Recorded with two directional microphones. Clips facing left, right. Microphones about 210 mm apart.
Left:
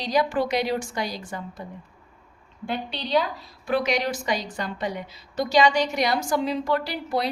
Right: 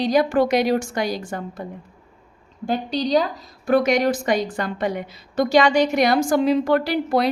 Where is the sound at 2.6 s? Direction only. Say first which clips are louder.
Right 8 dB; 40° right (ahead or behind).